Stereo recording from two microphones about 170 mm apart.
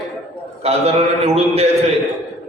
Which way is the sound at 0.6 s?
35° right (ahead or behind).